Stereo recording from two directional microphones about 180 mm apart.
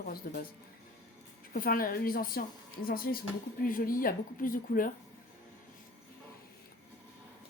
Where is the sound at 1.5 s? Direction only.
55° left (ahead or behind).